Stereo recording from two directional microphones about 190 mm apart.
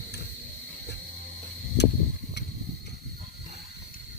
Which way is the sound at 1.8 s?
65° left (ahead or behind).